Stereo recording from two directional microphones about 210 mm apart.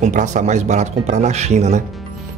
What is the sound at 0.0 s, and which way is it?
Speech, 35° right (ahead or behind).